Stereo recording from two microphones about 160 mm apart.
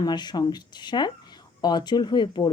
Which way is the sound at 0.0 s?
25° left (ahead or behind).